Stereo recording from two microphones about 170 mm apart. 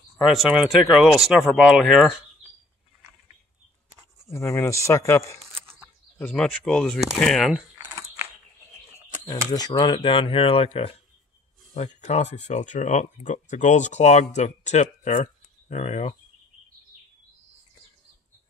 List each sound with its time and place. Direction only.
0.2 s speech: centre (ahead or behind)
4.3 s speech: 15° left (ahead or behind)
9.2 s speech: 25° left (ahead or behind); by 16.2 s 40° left (ahead or behind)